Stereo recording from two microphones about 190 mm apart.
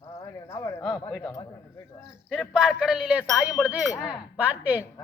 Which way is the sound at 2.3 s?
5° right (ahead or behind).